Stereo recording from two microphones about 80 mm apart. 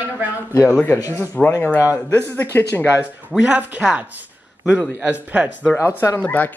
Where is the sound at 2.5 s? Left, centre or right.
Left.